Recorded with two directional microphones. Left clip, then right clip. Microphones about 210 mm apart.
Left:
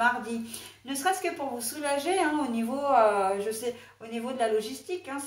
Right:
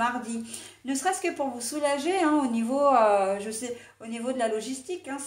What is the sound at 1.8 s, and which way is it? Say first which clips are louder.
A woman's voice: right 2 dB; 40° right (ahead or behind).